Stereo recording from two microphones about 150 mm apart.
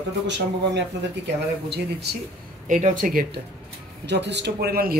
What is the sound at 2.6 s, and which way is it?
Speech, 55° right (ahead or behind).